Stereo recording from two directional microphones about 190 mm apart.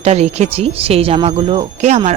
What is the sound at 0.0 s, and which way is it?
Speech, 35° right (ahead or behind).